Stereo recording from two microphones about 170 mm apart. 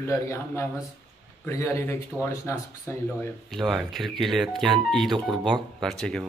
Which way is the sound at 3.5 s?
Centre (ahead or behind).